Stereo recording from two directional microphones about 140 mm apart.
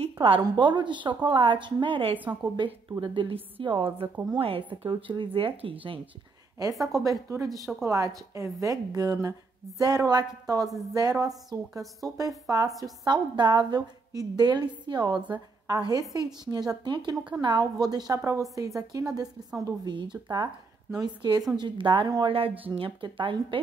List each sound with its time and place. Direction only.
0.0 s a sound: 40° right (ahead or behind)
0.4 s a woman's voice: 35° right (ahead or behind)
2.1 s a woman's voice: 10° right (ahead or behind)
2.5 s a woman's voice: 35° right (ahead or behind)
6.7 s a woman's voice: centre (ahead or behind)
7.0 s a woman's voice: 20° right (ahead or behind)